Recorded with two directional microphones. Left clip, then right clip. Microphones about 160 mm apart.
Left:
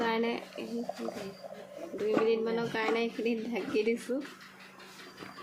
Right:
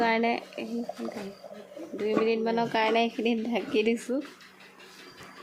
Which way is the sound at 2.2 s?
35° right (ahead or behind).